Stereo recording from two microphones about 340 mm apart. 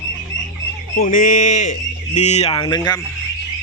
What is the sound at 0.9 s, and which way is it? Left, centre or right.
Speech, left.